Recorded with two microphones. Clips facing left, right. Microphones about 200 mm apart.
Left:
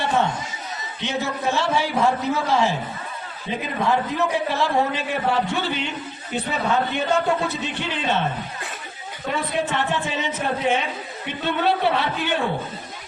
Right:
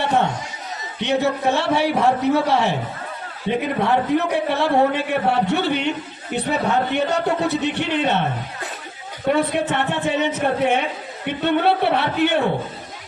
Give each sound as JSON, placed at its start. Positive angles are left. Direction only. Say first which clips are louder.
{"t": 1.0, "sound": "a man's voice", "louder": "right 6 dB", "side_deg": -65}
{"t": 9.3, "sound": "a man's voice", "louder": "right 5 dB", "side_deg": -60}